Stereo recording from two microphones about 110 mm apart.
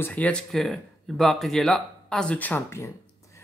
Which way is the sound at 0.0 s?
15° left (ahead or behind).